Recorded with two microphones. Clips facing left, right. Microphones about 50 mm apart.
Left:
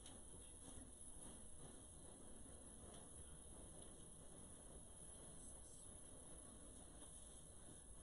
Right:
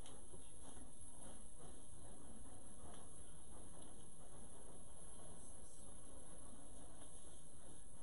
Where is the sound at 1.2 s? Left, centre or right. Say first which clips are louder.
Right 2 dB; centre.